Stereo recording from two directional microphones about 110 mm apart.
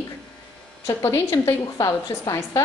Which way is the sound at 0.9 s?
30° left (ahead or behind).